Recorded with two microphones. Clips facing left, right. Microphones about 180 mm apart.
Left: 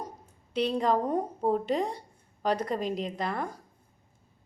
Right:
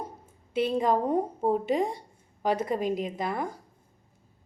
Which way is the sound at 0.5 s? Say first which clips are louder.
Right 1 dB; 5° right (ahead or behind).